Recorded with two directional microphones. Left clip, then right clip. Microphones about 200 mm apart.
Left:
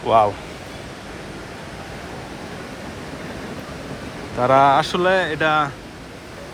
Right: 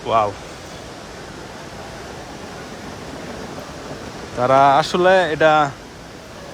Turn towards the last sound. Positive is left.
turn(degrees=-30)  # may be behind; listen again after turning